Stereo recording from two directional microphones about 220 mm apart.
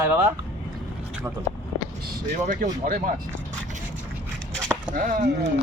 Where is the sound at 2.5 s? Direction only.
35° right (ahead or behind).